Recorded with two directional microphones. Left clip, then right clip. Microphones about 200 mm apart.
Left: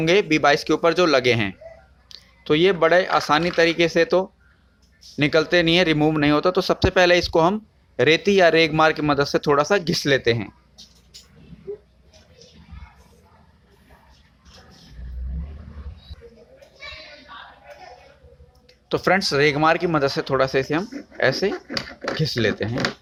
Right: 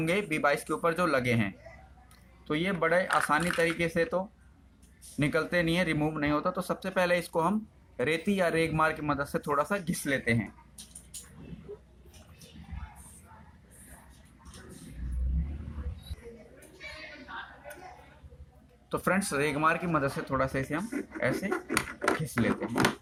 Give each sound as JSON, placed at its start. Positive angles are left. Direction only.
{"t": 0.0, "sound": "speech", "side_deg": 40}
{"t": 18.9, "sound": "speech", "side_deg": 45}